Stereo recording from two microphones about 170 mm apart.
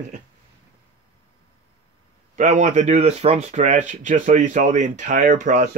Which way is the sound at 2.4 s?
45° right (ahead or behind).